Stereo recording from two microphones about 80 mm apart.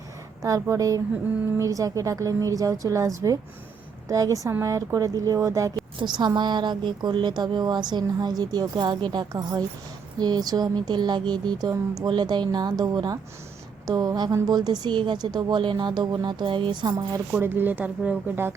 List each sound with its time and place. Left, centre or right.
0.4 s a woman's voice: right
6.0 s a woman's voice: right
14.5 s a woman's voice: right
17.4 s speech: right